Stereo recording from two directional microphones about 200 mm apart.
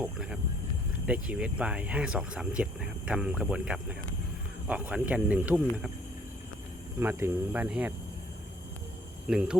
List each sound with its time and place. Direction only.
0.0 s a sound: 5° right (ahead or behind)
1.0 s speech: 5° right (ahead or behind)
7.0 s speech: 10° right (ahead or behind)
9.2 s speech: 5° right (ahead or behind)